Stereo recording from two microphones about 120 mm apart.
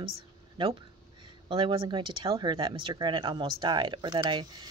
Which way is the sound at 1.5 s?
45° right (ahead or behind).